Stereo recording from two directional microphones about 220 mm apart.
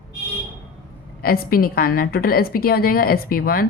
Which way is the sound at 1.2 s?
40° left (ahead or behind).